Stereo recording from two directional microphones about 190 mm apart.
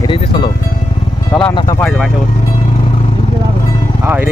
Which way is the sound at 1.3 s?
Centre (ahead or behind).